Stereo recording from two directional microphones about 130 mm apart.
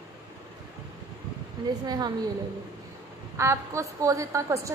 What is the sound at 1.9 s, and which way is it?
Speech, 30° right (ahead or behind).